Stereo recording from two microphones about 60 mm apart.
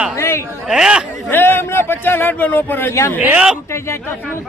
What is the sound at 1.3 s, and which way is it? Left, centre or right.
A man's voice, left.